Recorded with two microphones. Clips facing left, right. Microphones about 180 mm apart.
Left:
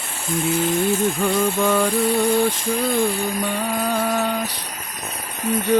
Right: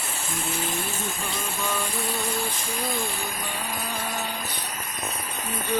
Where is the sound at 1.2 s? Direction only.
65° left (ahead or behind).